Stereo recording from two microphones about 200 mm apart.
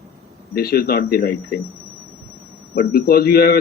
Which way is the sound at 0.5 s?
50° left (ahead or behind).